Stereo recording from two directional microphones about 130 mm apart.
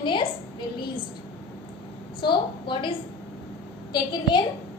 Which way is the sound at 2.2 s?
40° left (ahead or behind).